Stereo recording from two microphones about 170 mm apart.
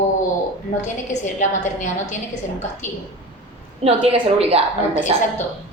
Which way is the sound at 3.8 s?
35° right (ahead or behind).